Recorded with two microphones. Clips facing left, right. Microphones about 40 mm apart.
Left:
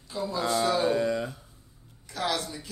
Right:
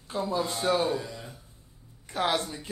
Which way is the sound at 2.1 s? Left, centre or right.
Right.